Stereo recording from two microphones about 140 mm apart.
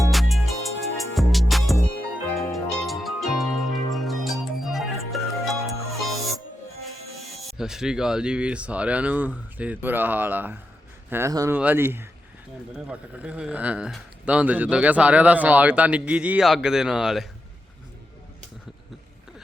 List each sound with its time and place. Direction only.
0.1 s music: centre (ahead or behind)
7.3 s speech: centre (ahead or behind)